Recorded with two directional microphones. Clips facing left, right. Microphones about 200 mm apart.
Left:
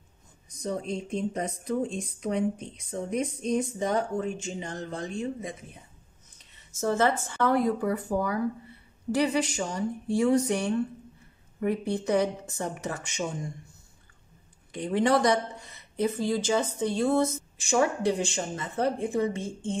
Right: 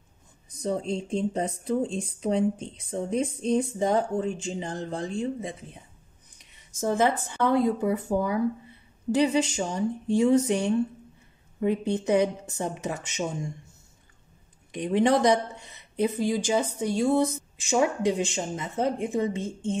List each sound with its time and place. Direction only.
0.6 s speech: 30° right (ahead or behind)
6.3 s speech: 15° right (ahead or behind)
14.7 s speech: 20° right (ahead or behind)